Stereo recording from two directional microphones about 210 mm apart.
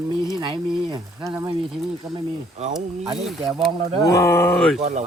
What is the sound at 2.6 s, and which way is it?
Speech, 35° right (ahead or behind).